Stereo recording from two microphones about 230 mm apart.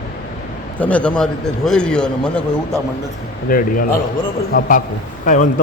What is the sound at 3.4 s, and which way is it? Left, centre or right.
A man's voice, left.